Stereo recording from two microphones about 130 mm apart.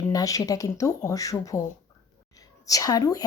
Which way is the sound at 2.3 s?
25° left (ahead or behind).